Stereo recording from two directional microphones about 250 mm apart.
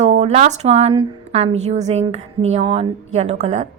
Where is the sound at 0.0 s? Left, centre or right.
Right.